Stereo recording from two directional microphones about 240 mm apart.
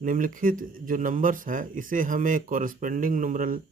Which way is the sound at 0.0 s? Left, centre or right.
Right.